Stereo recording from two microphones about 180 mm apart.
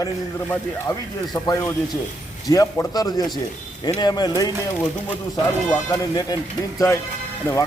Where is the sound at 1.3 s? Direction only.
20° left (ahead or behind).